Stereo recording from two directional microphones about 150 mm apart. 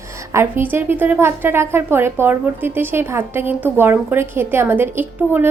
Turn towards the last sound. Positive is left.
turn(degrees=-15)  # may be behind; listen again after turning